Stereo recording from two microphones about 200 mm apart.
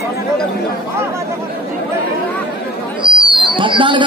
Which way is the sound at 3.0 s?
25° right (ahead or behind).